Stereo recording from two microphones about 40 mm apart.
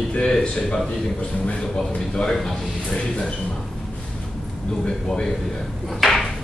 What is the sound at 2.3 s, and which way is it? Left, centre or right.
Speech, centre.